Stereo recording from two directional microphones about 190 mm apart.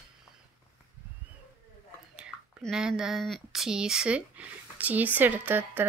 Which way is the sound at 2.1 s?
5° right (ahead or behind).